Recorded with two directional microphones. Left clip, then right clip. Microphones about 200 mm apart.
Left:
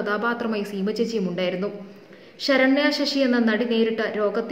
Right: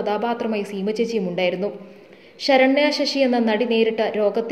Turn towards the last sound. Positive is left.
turn(degrees=-15)  # may be behind; listen again after turning